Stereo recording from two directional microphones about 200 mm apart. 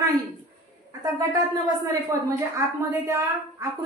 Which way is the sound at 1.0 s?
15° right (ahead or behind).